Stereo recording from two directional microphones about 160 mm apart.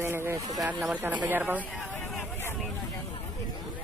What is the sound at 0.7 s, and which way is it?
Speech, centre (ahead or behind).